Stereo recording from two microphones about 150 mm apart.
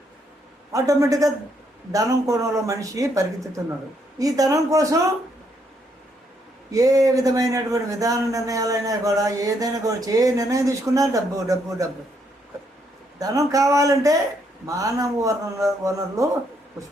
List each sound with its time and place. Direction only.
0.7 s a man's voice: 20° right (ahead or behind)
6.7 s a man's voice: 20° right (ahead or behind)
13.1 s a man's voice: 25° right (ahead or behind)